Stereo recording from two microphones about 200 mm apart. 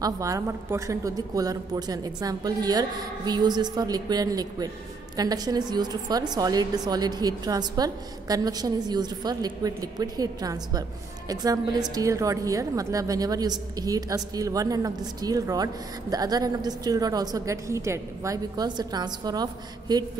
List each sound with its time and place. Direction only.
0.0 s a woman's voice: 15° right (ahead or behind)